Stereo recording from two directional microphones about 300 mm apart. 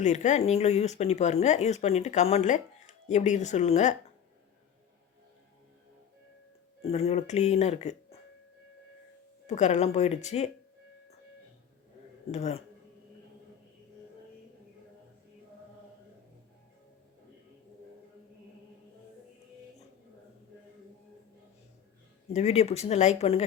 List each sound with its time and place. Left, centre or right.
0.0 s speech: left
6.8 s speech: left
9.5 s speech: left
12.3 s speech: left
22.3 s speech: left